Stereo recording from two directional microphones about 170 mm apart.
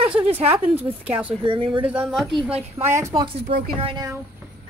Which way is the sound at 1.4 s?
30° right (ahead or behind).